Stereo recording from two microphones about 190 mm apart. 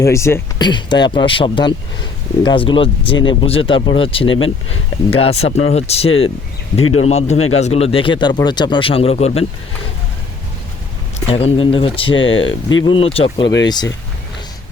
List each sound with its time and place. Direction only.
0.0 s speech: 15° left (ahead or behind)
4.3 s speech: 90° left
5.1 s speech: 30° left (ahead or behind)
6.1 s speech: 90° left
7.0 s speech: 35° left (ahead or behind)
11.3 s speech: 30° left (ahead or behind)
12.1 s speech: 90° left
12.8 s speech: 25° left (ahead or behind)